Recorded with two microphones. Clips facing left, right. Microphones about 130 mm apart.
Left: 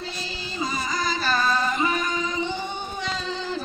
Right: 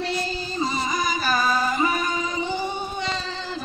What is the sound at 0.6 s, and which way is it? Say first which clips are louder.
Music: right 2 dB; 25° right (ahead or behind).